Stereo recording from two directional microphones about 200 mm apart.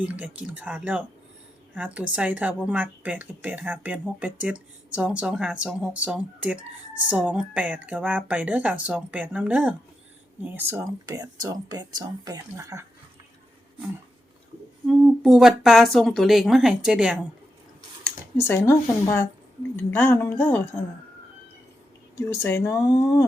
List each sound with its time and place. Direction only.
0.0 s a woman's voice: 5° right (ahead or behind)
14.8 s speech: centre (ahead or behind)
18.0 s speech: 10° left (ahead or behind)
22.3 s speech: 10° left (ahead or behind)